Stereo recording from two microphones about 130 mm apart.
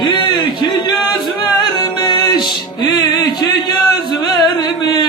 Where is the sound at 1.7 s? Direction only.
35° left (ahead or behind).